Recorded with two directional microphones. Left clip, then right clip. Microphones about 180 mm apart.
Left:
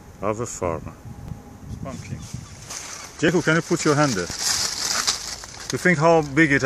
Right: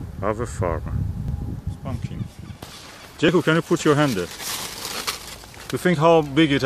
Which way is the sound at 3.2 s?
5° right (ahead or behind).